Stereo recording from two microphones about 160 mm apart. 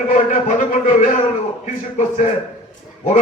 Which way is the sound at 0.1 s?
50° left (ahead or behind).